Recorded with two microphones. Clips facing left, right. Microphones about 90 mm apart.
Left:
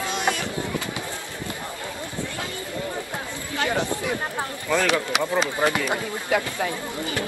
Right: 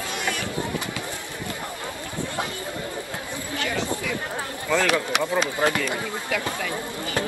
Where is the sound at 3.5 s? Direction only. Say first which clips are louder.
Left 3 dB; 25° left (ahead or behind).